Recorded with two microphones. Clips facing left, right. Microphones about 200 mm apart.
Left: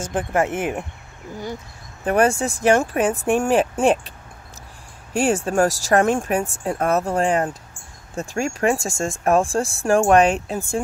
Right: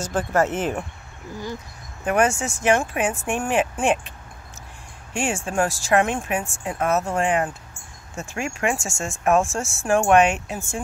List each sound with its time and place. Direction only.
0.1 s speech: 15° left (ahead or behind)
2.0 s speech: 35° left (ahead or behind)
5.1 s speech: 40° left (ahead or behind)